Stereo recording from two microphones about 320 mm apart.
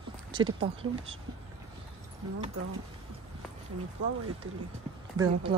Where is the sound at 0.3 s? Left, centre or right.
Centre.